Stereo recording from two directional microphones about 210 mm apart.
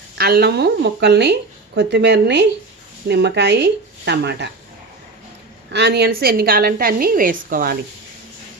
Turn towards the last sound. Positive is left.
turn(degrees=-40)  # may be behind; listen again after turning